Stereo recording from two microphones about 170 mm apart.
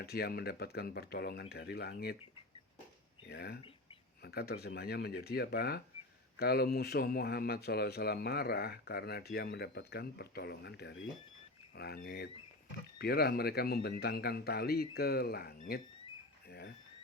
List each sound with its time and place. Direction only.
0.0 s speech: 65° left (ahead or behind)
3.2 s speech: 75° left (ahead or behind)
11.8 s speech: 65° left (ahead or behind)
16.5 s a sound: 65° left (ahead or behind)